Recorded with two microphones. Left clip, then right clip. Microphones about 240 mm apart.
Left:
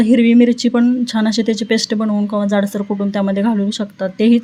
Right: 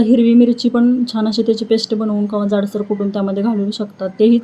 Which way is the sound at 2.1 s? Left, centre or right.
Left.